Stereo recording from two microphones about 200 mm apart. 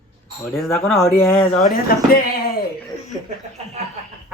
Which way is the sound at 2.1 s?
45° left (ahead or behind).